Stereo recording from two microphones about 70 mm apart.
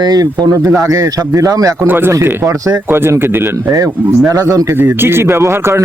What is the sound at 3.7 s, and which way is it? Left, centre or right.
Speech, right.